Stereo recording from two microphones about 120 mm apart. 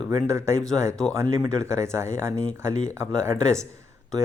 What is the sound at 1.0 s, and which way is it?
Speech, 10° left (ahead or behind).